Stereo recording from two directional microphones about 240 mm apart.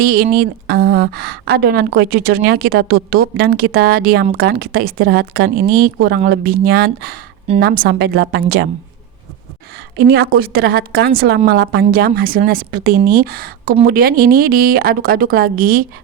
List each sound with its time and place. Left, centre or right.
0.0 s a woman's voice: right
10.1 s a woman's voice: right